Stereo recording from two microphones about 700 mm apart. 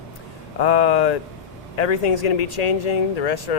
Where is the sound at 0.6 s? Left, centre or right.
Left.